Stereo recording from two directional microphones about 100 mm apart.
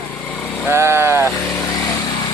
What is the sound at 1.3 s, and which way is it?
Vehicle, 40° left (ahead or behind).